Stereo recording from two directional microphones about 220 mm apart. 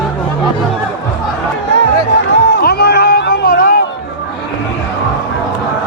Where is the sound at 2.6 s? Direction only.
45° left (ahead or behind).